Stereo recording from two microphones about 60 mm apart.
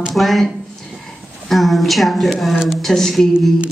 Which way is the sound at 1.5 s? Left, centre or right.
Centre.